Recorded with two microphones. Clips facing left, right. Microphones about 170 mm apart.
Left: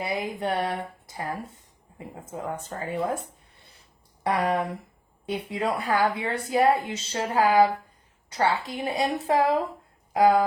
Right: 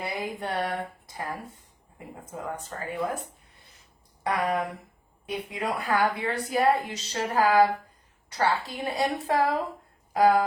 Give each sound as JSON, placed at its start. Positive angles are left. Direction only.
{"t": 0.0, "sound": "speech", "side_deg": 20}
{"t": 4.3, "sound": "speech", "side_deg": 30}